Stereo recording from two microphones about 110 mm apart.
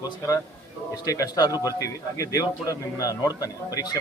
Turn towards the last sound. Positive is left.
turn(degrees=35)  # may be behind; listen again after turning